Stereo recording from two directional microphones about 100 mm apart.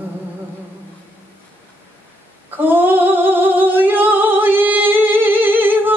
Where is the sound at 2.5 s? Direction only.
20° right (ahead or behind).